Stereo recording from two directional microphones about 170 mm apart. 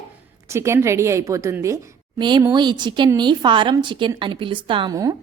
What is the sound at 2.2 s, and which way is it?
A woman's voice, 25° right (ahead or behind).